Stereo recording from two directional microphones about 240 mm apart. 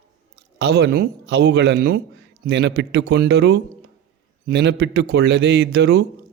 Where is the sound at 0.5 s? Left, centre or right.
Right.